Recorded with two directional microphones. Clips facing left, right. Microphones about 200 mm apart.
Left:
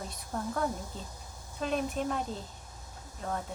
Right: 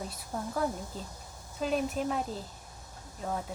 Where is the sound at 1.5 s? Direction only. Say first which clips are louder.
Right 1 dB; 5° right (ahead or behind).